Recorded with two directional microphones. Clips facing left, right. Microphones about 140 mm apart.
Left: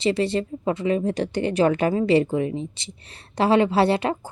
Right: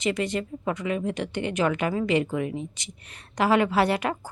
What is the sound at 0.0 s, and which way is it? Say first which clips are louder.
A woman's voice: left 5 dB; 30° left (ahead or behind).